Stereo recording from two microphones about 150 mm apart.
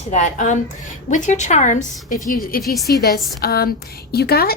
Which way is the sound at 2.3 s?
75° left (ahead or behind).